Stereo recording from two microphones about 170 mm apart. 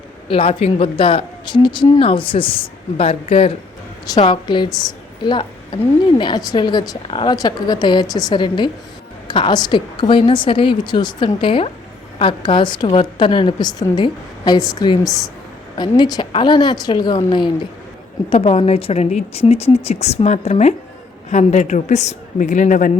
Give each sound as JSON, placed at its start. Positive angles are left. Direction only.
{"t": 0.3, "sound": "a woman's voice", "side_deg": 30}